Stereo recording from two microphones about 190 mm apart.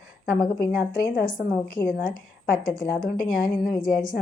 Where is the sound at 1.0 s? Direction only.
50° left (ahead or behind).